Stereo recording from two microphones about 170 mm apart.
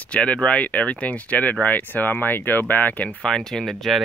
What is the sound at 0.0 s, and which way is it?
Speech, 5° left (ahead or behind).